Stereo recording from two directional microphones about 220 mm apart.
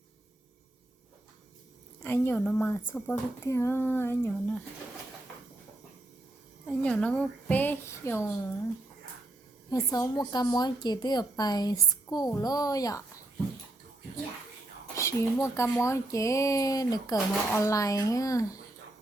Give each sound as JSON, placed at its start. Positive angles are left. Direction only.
{"t": 2.0, "sound": "speech", "side_deg": 10}
{"t": 6.7, "sound": "speech", "side_deg": 5}
{"t": 9.6, "sound": "speech", "side_deg": 15}
{"t": 14.9, "sound": "speech", "side_deg": 15}